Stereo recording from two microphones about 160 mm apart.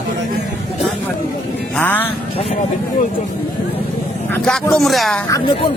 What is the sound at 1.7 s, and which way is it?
Music, 10° left (ahead or behind).